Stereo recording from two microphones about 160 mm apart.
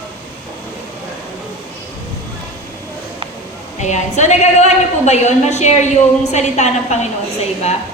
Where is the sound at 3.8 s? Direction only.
45° left (ahead or behind).